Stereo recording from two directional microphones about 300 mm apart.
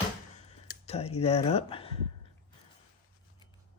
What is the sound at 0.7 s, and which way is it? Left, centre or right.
Speech, left.